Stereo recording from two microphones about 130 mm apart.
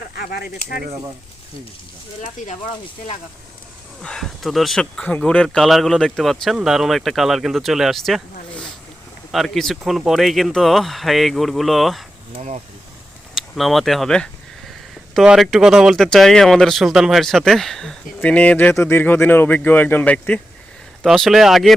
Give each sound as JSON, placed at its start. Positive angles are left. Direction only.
{"t": 4.0, "sound": "speech", "side_deg": 5}
{"t": 13.3, "sound": "speech", "side_deg": 0}
{"t": 21.0, "sound": "speech", "side_deg": 0}